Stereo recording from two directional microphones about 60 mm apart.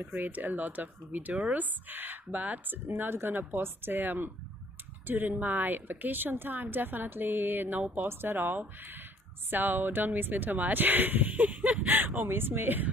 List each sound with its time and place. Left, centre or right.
0.0 s speech: right